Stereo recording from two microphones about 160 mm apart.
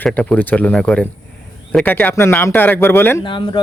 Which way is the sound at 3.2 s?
30° left (ahead or behind).